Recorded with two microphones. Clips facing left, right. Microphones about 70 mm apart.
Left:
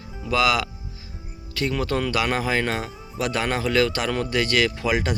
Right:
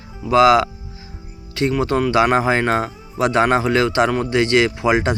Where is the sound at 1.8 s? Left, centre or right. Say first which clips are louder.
Right 8 dB; right.